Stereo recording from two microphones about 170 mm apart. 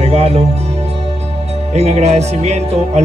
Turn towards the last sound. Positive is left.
turn(degrees=-40)  # may be behind; listen again after turning